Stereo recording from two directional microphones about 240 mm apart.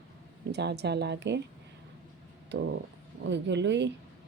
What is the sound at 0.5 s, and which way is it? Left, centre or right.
Speech, right.